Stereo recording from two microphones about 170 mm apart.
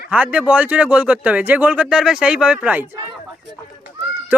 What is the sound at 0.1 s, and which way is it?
Speech, 10° right (ahead or behind).